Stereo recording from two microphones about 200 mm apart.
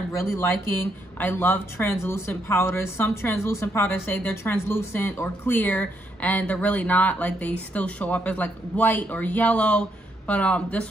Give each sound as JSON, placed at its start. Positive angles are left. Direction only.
{"t": 0.3, "sound": "speech", "side_deg": 15}